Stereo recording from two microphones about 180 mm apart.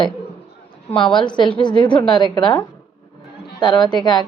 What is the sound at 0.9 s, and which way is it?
A woman's voice, 25° left (ahead or behind).